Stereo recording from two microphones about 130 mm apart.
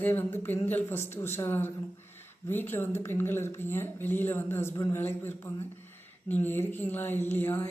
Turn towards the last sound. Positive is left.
turn(degrees=15)  # may be behind; listen again after turning